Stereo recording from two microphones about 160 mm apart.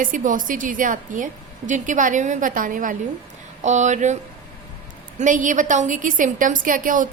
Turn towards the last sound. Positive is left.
turn(degrees=-55)  # may be behind; listen again after turning